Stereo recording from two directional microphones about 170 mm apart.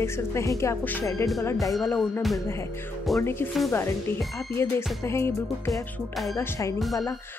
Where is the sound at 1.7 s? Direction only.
Centre (ahead or behind).